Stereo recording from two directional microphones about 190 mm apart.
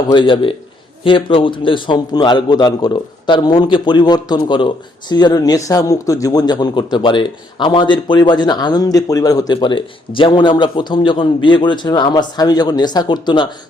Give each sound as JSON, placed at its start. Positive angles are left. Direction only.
{"t": 0.1, "sound": "a man's voice", "side_deg": 25}